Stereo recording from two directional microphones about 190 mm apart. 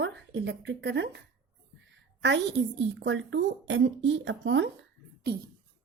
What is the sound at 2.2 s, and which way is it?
A woman's voice, 65° right (ahead or behind).